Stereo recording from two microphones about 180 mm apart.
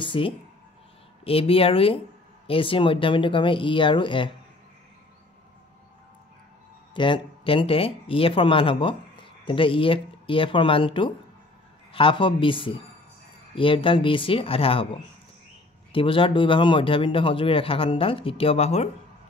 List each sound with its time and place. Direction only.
0.0 s a sound: 30° left (ahead or behind)
1.2 s speech: 30° left (ahead or behind)
6.9 s speech: 25° left (ahead or behind)
15.9 s speech: 30° left (ahead or behind)